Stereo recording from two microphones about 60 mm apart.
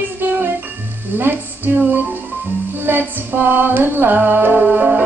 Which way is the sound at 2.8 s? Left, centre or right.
Right.